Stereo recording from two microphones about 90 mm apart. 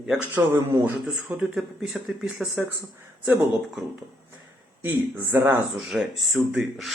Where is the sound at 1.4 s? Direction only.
10° right (ahead or behind).